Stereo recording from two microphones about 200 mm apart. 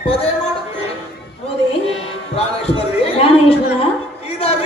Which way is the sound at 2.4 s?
30° left (ahead or behind).